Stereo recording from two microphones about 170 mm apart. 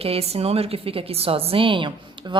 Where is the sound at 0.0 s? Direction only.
35° right (ahead or behind).